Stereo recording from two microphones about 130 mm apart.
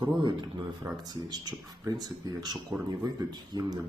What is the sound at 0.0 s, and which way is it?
Speech, 35° right (ahead or behind).